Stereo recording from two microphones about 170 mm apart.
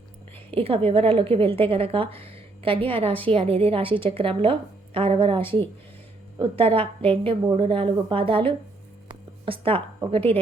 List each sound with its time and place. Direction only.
0.5 s a woman's voice: 35° right (ahead or behind)